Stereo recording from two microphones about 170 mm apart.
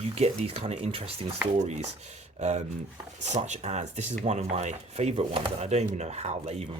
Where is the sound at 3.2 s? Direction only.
45° right (ahead or behind).